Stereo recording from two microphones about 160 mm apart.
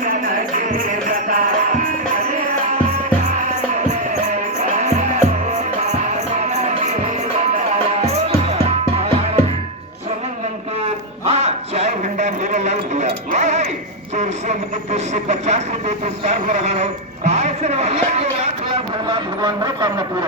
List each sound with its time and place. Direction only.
0.0 s music: 65° right (ahead or behind)
3.8 s music: 45° right (ahead or behind)
8.3 s music: 40° right (ahead or behind)
11.3 s a sound: 40° right (ahead or behind)
14.9 s a woman's voice: 45° right (ahead or behind)
19.0 s a man's voice: 25° right (ahead or behind)